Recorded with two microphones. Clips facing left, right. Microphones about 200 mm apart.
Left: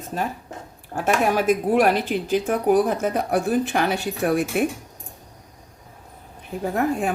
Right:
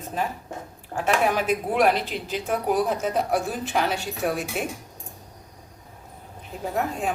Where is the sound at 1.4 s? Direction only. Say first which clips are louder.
Left 3 dB; 50° left (ahead or behind).